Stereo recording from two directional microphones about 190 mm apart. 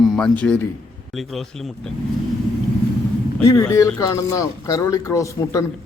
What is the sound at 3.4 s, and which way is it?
A man's voice, 15° left (ahead or behind).